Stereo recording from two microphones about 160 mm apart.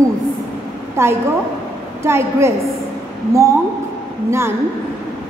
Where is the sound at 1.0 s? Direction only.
15° right (ahead or behind).